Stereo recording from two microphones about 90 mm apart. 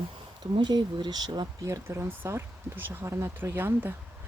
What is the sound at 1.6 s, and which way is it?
Speech, 30° right (ahead or behind).